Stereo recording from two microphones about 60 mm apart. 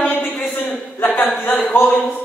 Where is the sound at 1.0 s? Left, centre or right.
Left.